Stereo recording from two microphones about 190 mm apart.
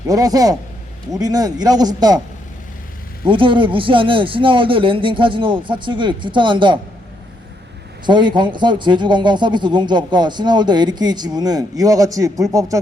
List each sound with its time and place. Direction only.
0.1 s a man's voice: 20° right (ahead or behind)
3.2 s a man's voice: 25° right (ahead or behind)
8.0 s a man's voice: 25° right (ahead or behind)